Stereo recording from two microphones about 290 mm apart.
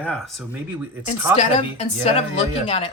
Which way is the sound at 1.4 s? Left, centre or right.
Left.